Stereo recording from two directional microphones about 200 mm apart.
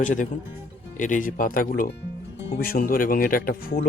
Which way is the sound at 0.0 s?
40° left (ahead or behind).